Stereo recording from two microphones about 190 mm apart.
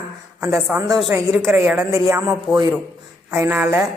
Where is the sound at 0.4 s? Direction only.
15° right (ahead or behind).